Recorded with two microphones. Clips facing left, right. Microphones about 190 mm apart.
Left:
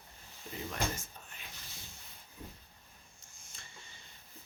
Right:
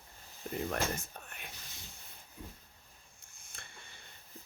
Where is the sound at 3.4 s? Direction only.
60° right (ahead or behind).